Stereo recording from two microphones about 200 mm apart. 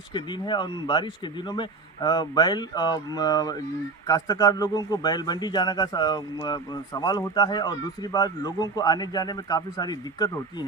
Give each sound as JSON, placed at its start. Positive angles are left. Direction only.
{"t": 0.1, "sound": "speech", "side_deg": 25}